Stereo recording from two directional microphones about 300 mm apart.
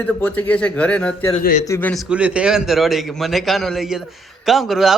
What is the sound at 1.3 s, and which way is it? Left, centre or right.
Speech, left.